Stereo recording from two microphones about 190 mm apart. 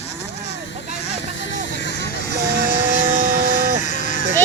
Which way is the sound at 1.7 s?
65° left (ahead or behind).